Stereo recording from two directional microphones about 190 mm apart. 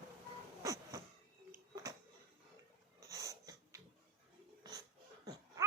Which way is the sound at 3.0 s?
15° right (ahead or behind).